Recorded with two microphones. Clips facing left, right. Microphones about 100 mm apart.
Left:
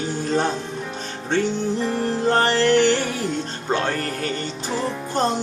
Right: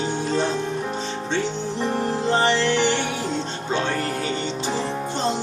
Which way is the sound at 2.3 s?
50° left (ahead or behind).